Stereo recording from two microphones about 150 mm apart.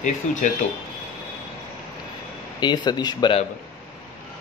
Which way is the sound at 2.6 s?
30° left (ahead or behind).